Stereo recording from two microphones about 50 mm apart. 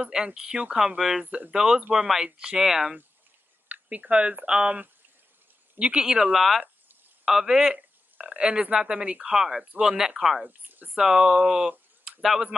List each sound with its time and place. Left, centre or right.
0.0 s speech: centre
1.8 s speech: right
2.0 s speech: centre
3.6 s a sound: right
4.1 s speech: right
5.8 s speech: centre
6.3 s speech: centre
7.7 s a sound: centre
8.7 s speech: right
9.3 s speech: centre
10.4 s a sound: right
11.1 s speech: centre
12.0 s a sound: centre